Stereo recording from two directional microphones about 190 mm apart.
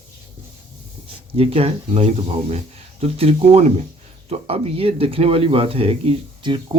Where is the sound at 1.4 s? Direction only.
30° right (ahead or behind).